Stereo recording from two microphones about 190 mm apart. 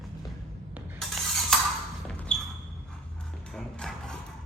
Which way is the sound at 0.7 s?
Centre (ahead or behind).